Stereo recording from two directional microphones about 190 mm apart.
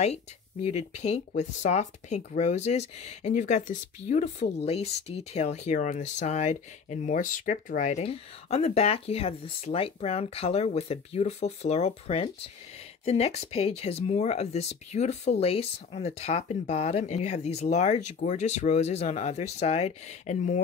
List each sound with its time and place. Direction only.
0.0 s speech: 35° left (ahead or behind)